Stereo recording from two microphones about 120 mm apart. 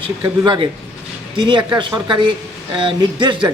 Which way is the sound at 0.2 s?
40° right (ahead or behind).